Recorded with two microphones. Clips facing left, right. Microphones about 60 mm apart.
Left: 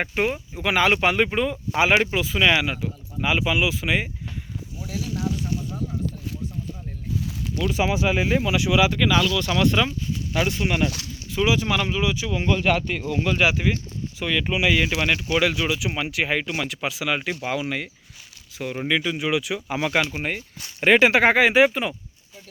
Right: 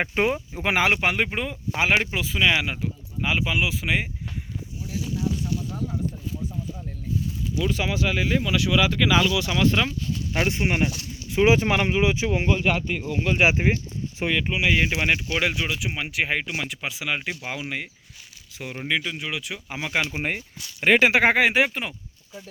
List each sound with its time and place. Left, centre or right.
0.1 s speech: right
1.0 s speech: centre
4.9 s speech: left
7.7 s speech: centre
10.3 s speech: right
10.8 s speech: left
11.3 s speech: right
11.8 s speech: right
12.5 s speech: centre
13.2 s speech: right
15.4 s speech: centre
20.8 s speech: centre